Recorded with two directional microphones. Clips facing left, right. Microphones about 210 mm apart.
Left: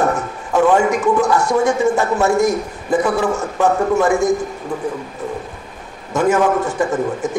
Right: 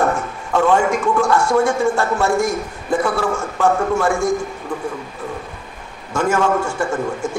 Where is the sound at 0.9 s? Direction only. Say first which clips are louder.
Left 2 dB; 20° left (ahead or behind).